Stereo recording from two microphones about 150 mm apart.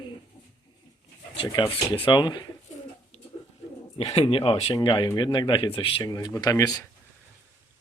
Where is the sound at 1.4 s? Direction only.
35° left (ahead or behind).